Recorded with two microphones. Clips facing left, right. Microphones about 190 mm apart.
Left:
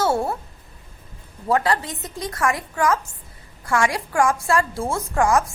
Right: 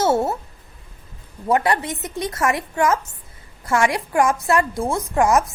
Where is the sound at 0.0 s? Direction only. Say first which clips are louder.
Right 2 dB; 20° right (ahead or behind).